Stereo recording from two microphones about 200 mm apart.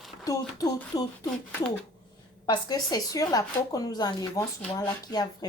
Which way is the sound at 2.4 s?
20° left (ahead or behind).